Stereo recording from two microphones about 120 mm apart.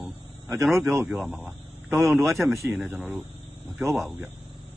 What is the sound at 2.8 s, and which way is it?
Speech, 15° right (ahead or behind).